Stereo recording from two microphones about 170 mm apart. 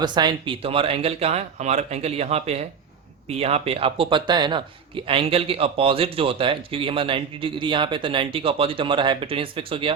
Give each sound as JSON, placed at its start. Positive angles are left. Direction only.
{"t": 0.0, "sound": "speech", "side_deg": -25}